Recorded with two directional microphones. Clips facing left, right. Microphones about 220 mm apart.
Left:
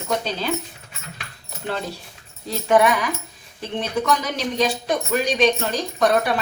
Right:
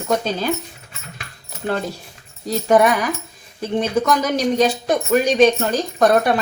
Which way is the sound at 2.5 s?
40° right (ahead or behind).